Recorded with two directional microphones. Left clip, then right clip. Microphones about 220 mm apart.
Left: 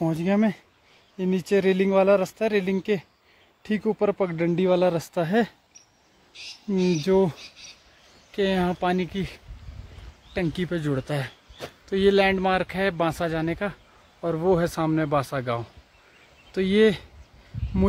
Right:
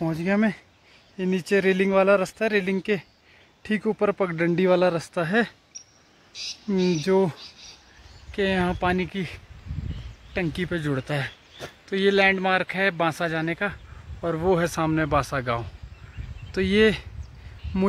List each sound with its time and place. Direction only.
0.0 s speech: 5° left (ahead or behind)
4.9 s speech: 5° left (ahead or behind)
6.4 s speech: 30° right (ahead or behind)
6.8 s speech: 5° left (ahead or behind)